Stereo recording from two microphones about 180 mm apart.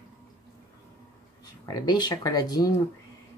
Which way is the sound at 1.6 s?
20° left (ahead or behind).